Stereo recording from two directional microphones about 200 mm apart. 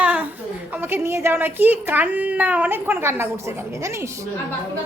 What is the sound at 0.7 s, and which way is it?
A child's voice, 10° right (ahead or behind).